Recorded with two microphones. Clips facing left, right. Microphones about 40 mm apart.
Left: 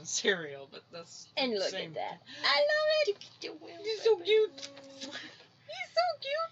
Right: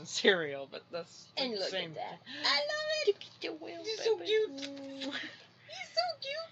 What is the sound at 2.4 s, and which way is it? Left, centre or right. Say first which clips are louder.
Speech: left 6 dB; left.